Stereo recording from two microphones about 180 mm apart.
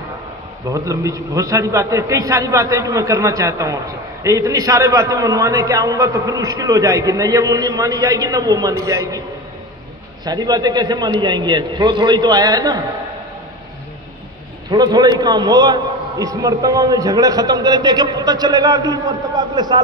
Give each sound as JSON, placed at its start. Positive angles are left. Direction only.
{"t": 0.7, "sound": "a man's voice", "side_deg": -20}
{"t": 10.2, "sound": "a man's voice", "side_deg": -20}
{"t": 14.7, "sound": "a man's voice", "side_deg": -20}